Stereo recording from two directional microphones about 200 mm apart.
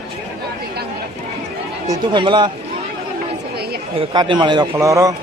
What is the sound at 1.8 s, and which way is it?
Speech, 25° right (ahead or behind).